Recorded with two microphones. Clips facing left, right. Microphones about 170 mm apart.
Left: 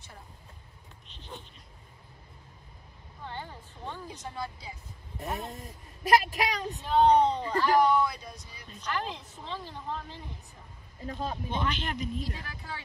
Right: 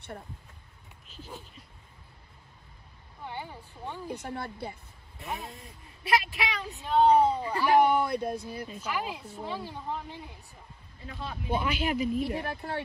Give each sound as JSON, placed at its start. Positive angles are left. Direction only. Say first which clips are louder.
{"t": 1.0, "sound": "a sound", "louder": "right 1 dB", "side_deg": -5}
{"t": 3.3, "sound": "speech", "louder": "right 1 dB", "side_deg": -10}
{"t": 4.1, "sound": "speech", "louder": "right 3 dB", "side_deg": -60}
{"t": 5.5, "sound": "speech", "louder": "left 4 dB", "side_deg": 40}
{"t": 6.8, "sound": "speech", "louder": "right 1 dB", "side_deg": 0}
{"t": 7.9, "sound": "speech", "louder": "right 1 dB", "side_deg": -60}
{"t": 8.6, "sound": "speech", "louder": "left 4 dB", "side_deg": -10}
{"t": 11.1, "sound": "speech", "louder": "left 5 dB", "side_deg": 40}
{"t": 11.5, "sound": "speech", "louder": "right 7 dB", "side_deg": -10}
{"t": 12.2, "sound": "speech", "louder": "right 8 dB", "side_deg": -60}